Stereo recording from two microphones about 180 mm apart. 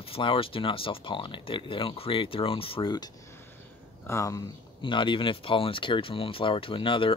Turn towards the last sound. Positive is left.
turn(degrees=30)  # may be behind; listen again after turning